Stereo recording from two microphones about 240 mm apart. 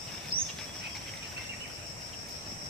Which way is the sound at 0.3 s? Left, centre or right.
Right.